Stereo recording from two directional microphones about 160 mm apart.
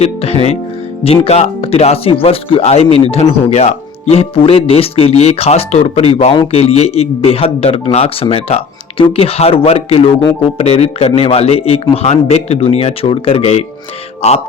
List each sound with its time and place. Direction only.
0.0 s speech: 40° left (ahead or behind)